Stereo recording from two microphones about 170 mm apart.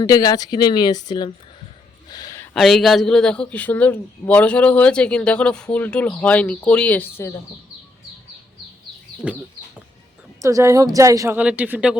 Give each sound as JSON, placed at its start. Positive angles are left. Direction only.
{"t": 0.0, "sound": "speech", "side_deg": 20}
{"t": 2.0, "sound": "a sound", "side_deg": 20}
{"t": 2.6, "sound": "a man's voice", "side_deg": 0}
{"t": 9.2, "sound": "speech", "side_deg": -5}
{"t": 10.4, "sound": "a woman's voice", "side_deg": -20}
{"t": 11.3, "sound": "speech", "side_deg": -10}